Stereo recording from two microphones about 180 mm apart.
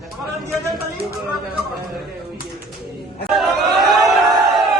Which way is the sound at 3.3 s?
Centre (ahead or behind).